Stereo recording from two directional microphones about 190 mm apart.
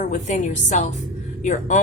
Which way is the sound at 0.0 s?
40° left (ahead or behind).